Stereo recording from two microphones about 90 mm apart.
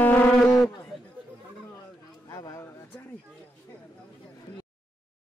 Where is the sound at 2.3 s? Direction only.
40° left (ahead or behind).